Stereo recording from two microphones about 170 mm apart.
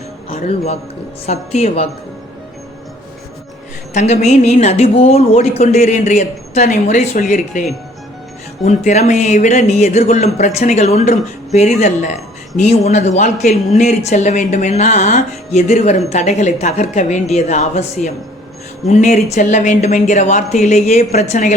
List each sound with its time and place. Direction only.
0.3 s speech: 35° left (ahead or behind)
3.9 s speech: 40° left (ahead or behind)
8.6 s speech: 40° left (ahead or behind)